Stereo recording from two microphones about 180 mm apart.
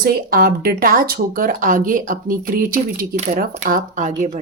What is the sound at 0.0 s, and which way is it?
Speech, 55° right (ahead or behind).